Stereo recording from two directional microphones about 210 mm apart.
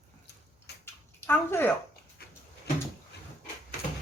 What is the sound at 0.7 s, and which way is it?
Bathtub, 50° left (ahead or behind).